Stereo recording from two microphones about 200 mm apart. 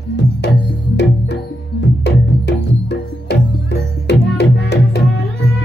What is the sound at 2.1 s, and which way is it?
Music, 55° left (ahead or behind).